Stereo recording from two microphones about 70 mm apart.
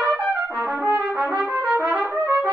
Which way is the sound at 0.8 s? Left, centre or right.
Right.